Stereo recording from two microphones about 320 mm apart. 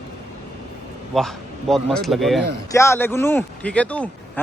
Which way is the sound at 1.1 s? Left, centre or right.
Centre.